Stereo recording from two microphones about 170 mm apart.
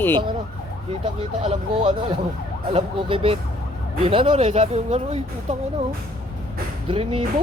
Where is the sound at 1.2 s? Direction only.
30° right (ahead or behind).